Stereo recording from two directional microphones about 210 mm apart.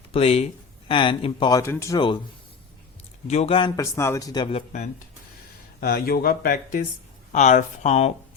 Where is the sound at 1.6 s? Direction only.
15° left (ahead or behind).